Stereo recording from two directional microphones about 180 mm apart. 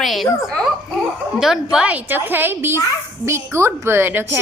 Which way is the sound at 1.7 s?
10° right (ahead or behind).